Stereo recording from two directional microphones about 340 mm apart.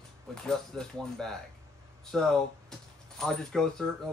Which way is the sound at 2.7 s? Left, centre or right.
Centre.